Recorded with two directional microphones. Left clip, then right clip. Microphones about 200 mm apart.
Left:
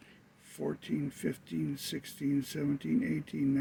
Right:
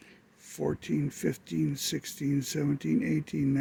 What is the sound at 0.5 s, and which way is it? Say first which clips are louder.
Speech: right 5 dB; 50° right (ahead or behind).